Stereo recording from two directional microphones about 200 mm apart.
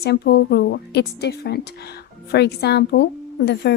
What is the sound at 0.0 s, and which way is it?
A woman's voice, 55° left (ahead or behind).